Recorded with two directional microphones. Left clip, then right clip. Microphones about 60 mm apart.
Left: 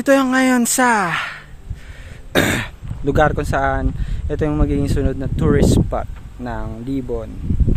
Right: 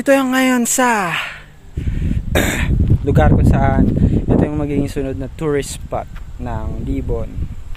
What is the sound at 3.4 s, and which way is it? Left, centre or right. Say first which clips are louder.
Speech: right 1 dB; left.